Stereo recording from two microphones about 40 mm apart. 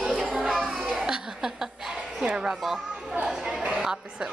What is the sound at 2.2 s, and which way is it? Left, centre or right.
Speech, right.